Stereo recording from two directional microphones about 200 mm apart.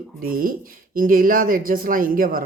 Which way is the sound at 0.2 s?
45° right (ahead or behind).